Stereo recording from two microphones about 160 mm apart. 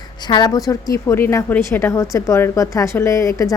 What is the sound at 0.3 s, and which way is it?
A woman's voice, 25° left (ahead or behind).